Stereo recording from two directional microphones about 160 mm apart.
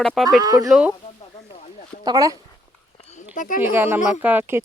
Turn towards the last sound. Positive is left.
turn(degrees=-10)  # may be behind; listen again after turning